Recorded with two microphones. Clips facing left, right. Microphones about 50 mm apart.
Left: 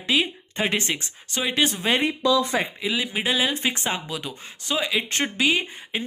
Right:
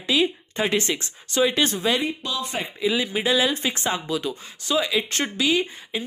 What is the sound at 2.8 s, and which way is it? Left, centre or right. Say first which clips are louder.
Speech: right 3 dB; centre.